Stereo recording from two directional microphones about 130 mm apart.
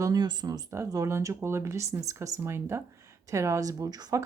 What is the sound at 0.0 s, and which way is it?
Speech, 30° right (ahead or behind).